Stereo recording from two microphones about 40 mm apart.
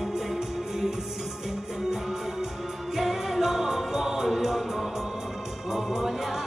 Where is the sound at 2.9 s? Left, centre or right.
Centre.